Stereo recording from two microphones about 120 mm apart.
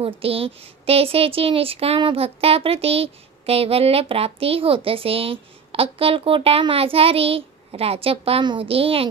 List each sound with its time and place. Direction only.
0.0 s a woman's voice: 50° right (ahead or behind)